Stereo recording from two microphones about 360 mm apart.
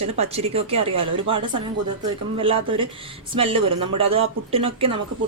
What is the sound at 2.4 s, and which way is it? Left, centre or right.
Speech, centre.